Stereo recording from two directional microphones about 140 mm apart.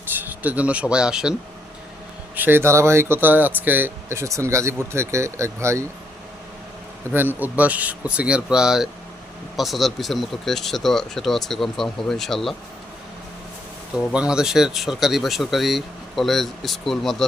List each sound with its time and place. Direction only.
0.1 s speech: 15° right (ahead or behind)
7.3 s speech: 10° right (ahead or behind)
14.1 s speech: 5° right (ahead or behind)